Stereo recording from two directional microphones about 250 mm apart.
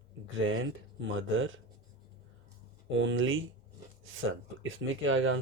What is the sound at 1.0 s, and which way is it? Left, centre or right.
Speech, right.